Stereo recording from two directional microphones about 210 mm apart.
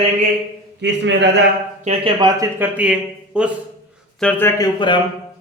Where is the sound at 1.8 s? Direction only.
25° right (ahead or behind).